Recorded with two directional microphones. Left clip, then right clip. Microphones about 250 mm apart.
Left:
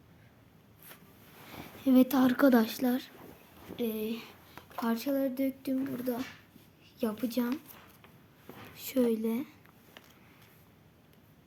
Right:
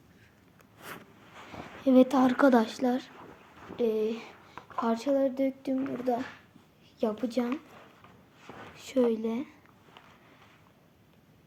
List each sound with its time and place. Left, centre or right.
1.8 s a woman's voice: left
8.7 s speech: left